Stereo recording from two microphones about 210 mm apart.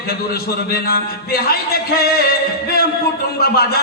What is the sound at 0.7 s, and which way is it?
A man's voice, 45° left (ahead or behind).